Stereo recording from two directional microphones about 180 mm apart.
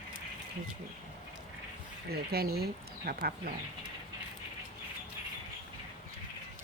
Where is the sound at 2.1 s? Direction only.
60° right (ahead or behind).